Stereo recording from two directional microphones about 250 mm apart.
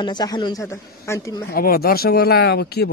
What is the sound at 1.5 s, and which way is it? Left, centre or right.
A man's voice, left.